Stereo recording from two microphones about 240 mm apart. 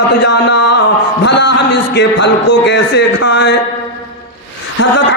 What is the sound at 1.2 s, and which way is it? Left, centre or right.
Speech, left.